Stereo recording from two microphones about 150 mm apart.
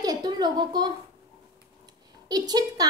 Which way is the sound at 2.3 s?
25° right (ahead or behind).